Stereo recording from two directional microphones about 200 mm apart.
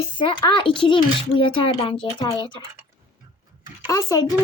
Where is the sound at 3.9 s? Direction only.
15° left (ahead or behind).